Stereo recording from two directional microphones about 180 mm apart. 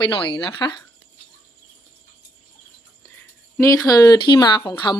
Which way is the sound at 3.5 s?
20° left (ahead or behind).